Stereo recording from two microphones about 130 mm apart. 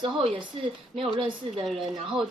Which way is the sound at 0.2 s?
45° right (ahead or behind).